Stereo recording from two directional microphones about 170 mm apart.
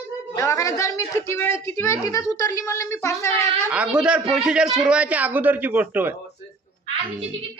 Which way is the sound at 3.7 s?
5° right (ahead or behind).